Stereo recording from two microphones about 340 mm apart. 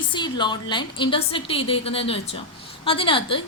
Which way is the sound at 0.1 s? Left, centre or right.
Centre.